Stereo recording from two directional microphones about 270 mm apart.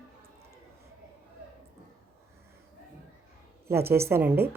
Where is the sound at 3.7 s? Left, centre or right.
Centre.